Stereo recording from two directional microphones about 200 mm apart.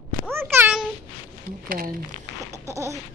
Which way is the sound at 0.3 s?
10° right (ahead or behind).